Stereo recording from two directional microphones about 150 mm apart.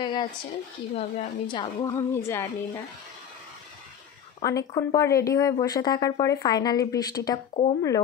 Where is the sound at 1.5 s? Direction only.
30° left (ahead or behind).